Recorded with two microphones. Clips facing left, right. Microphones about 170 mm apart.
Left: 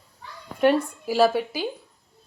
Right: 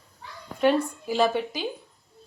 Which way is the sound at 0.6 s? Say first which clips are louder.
Left 2 dB; 5° left (ahead or behind).